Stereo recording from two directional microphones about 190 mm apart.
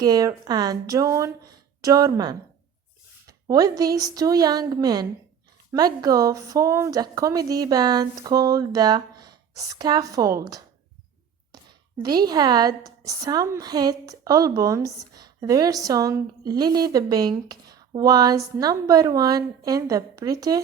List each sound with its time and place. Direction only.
0.0 s a woman's voice: 20° right (ahead or behind)
12.0 s a woman's voice: 20° right (ahead or behind)